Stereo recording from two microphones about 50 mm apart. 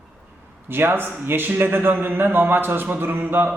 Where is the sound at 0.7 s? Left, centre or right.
Right.